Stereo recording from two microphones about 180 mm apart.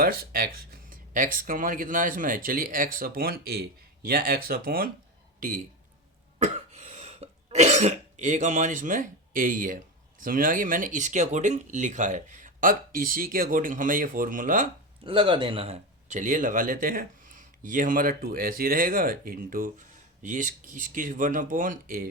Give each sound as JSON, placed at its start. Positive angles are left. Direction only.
{"t": 0.0, "sound": "speech", "side_deg": -55}
{"t": 6.4, "sound": "cough", "side_deg": -40}
{"t": 15.0, "sound": "speech", "side_deg": -30}